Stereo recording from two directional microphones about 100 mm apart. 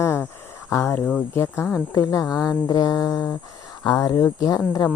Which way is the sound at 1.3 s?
25° left (ahead or behind).